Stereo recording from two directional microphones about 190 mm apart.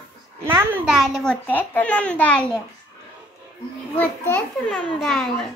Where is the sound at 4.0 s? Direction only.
10° left (ahead or behind).